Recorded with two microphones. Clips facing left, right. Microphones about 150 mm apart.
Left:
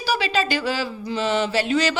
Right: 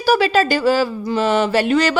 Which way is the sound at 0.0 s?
45° right (ahead or behind).